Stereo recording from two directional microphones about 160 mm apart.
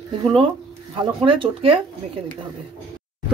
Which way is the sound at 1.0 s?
30° right (ahead or behind).